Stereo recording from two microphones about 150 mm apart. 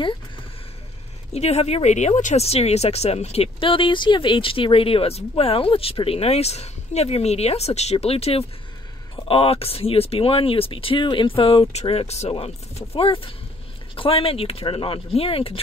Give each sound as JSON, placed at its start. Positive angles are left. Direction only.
{"t": 1.3, "sound": "speech", "side_deg": 45}